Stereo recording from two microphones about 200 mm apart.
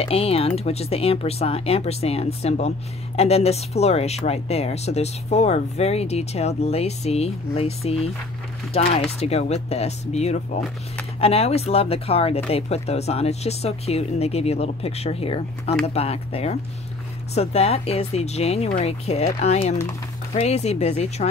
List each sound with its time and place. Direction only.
0.0 s speech: 30° left (ahead or behind)